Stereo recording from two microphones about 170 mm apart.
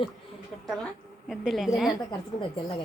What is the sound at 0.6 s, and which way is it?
A woman's voice, centre (ahead or behind).